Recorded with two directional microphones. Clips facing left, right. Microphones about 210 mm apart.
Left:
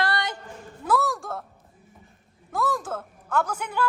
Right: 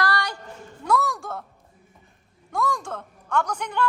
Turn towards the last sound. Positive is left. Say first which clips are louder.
# right 1 dB
turn(degrees=5)  # may be behind; listen again after turning